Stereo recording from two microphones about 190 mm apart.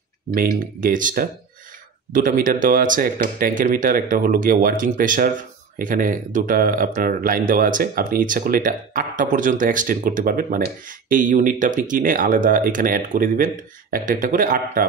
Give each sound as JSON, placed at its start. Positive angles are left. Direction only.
{"t": 0.3, "sound": "speech", "side_deg": -50}